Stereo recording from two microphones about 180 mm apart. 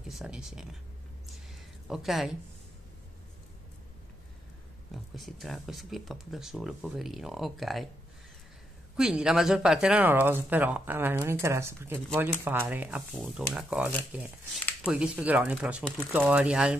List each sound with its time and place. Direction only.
0.0 s speech: centre (ahead or behind)
1.9 s speech: centre (ahead or behind)
4.9 s speech: centre (ahead or behind)
8.9 s speech: 5° right (ahead or behind)